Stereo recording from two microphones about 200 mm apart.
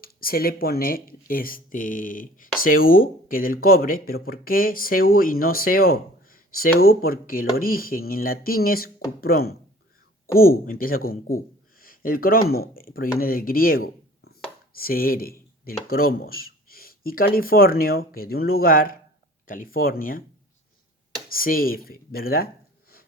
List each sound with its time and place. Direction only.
0.0 s speech: 45° left (ahead or behind)
21.2 s speech: 45° left (ahead or behind)